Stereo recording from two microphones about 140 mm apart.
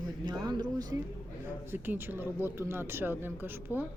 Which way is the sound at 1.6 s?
15° right (ahead or behind).